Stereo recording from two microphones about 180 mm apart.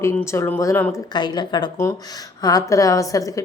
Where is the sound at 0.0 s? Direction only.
15° left (ahead or behind).